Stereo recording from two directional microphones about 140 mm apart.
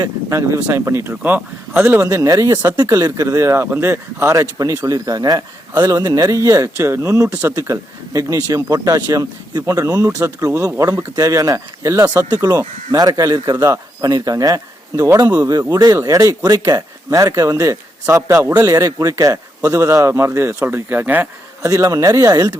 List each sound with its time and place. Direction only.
0.0 s speech: 20° right (ahead or behind)
12.5 s speech: 30° right (ahead or behind)